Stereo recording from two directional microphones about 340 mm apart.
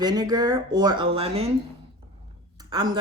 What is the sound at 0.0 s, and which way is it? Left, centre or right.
Speech, centre.